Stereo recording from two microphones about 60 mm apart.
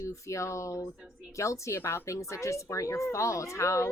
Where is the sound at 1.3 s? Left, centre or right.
Left.